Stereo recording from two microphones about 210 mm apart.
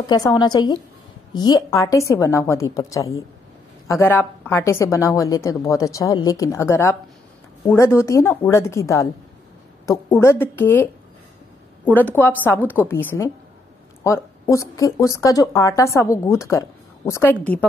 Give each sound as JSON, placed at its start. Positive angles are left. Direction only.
{"t": 0.0, "sound": "a woman's voice", "side_deg": 20}